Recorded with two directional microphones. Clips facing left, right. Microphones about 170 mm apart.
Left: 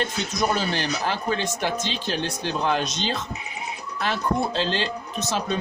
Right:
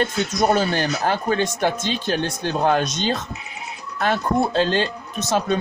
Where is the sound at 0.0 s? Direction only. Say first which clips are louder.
Right 5 dB; 45° right (ahead or behind).